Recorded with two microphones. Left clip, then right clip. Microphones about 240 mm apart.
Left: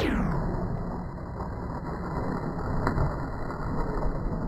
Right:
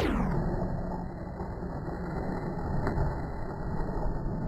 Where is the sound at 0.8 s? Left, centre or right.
Centre.